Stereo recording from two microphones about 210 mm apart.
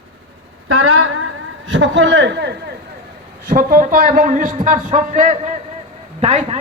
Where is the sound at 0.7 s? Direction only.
90° right.